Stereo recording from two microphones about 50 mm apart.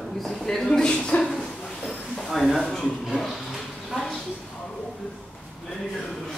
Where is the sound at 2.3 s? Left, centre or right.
Centre.